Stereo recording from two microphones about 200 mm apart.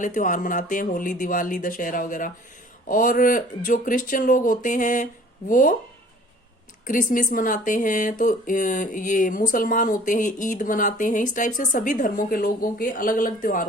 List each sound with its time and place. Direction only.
0.0 s speech: 40° left (ahead or behind)
6.8 s speech: 40° left (ahead or behind)